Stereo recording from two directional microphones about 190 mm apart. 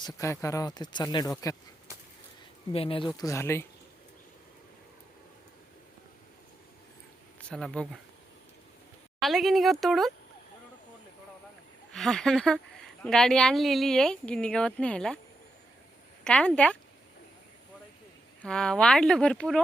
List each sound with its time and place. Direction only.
0.0 s speech: 15° left (ahead or behind)
2.7 s speech: 30° left (ahead or behind); by 3.7 s 15° left (ahead or behind)
7.5 s speech: 5° left (ahead or behind)
9.2 s speech: centre (ahead or behind)
11.9 s speech: centre (ahead or behind)
16.2 s speech: 5° left (ahead or behind)
18.4 s speech: 5° left (ahead or behind)